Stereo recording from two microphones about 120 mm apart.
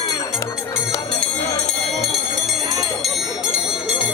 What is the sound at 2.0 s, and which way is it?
Bell, centre (ahead or behind).